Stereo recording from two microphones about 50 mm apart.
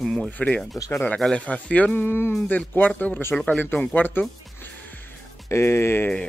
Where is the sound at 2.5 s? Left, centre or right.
Left.